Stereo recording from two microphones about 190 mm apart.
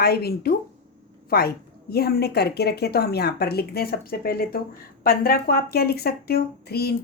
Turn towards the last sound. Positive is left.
turn(degrees=55)  # may be behind; listen again after turning